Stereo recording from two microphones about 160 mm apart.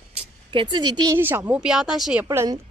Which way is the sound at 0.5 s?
30° right (ahead or behind).